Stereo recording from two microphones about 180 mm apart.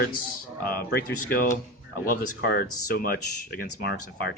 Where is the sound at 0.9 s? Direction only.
65° left (ahead or behind).